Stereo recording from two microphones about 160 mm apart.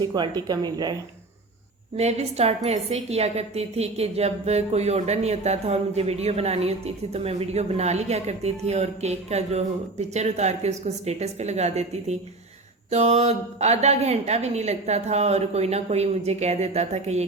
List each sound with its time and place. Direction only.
0.0 s speech: 25° right (ahead or behind)
2.0 s a woman's voice: 40° right (ahead or behind)